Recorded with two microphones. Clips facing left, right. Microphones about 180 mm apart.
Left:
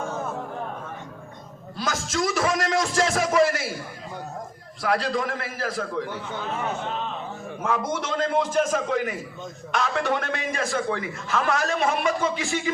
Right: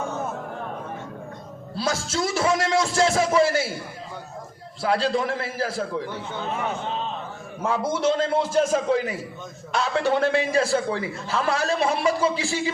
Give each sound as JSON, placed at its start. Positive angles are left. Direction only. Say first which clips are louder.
{"t": 1.7, "sound": "a man's voice", "louder": "right 2 dB", "side_deg": -30}
{"t": 4.8, "sound": "a man's voice", "louder": "right 2 dB", "side_deg": -30}
{"t": 7.6, "sound": "a man's voice", "louder": "right 4 dB", "side_deg": -30}